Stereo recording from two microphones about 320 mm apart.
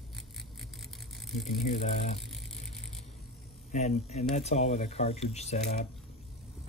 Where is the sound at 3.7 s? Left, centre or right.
Left.